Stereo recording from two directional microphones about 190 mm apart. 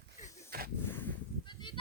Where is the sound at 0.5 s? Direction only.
50° right (ahead or behind).